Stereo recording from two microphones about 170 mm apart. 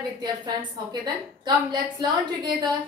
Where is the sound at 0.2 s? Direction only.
25° right (ahead or behind).